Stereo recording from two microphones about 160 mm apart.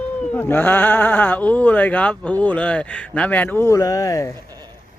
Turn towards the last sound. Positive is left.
turn(degrees=-25)  # may be behind; listen again after turning